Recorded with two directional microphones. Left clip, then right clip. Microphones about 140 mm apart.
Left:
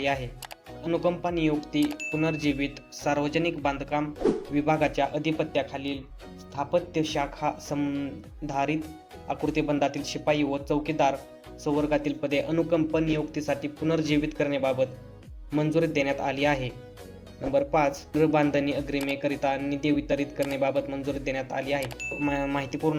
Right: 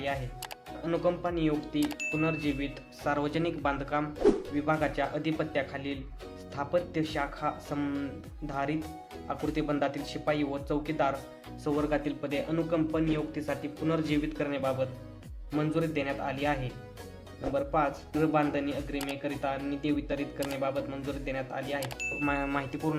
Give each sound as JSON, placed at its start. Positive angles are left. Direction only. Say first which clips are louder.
{"t": 0.9, "sound": "speech", "louder": "left 3 dB", "side_deg": 10}
{"t": 1.8, "sound": "speech", "louder": "left 3 dB", "side_deg": 0}
{"t": 2.2, "sound": "speech", "louder": "left 6 dB", "side_deg": 20}
{"t": 4.5, "sound": "a man's voice", "louder": "left 5 dB", "side_deg": 25}
{"t": 5.1, "sound": "speech", "louder": "left 4 dB", "side_deg": 10}
{"t": 11.6, "sound": "a man's voice", "louder": "left 4 dB", "side_deg": 5}
{"t": 21.8, "sound": "speech", "louder": "left 2 dB", "side_deg": 0}
{"t": 22.3, "sound": "speech", "louder": "left 4 dB", "side_deg": 15}